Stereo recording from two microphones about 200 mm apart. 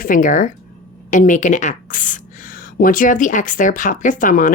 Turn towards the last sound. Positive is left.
turn(degrees=40)  # may be behind; listen again after turning